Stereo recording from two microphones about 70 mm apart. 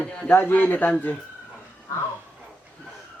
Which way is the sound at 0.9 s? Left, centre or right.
Centre.